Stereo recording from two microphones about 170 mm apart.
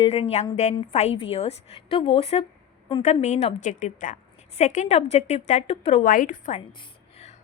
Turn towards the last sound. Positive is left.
turn(degrees=50)  # may be behind; listen again after turning